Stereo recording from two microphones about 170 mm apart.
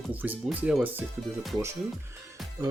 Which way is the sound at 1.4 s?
Centre (ahead or behind).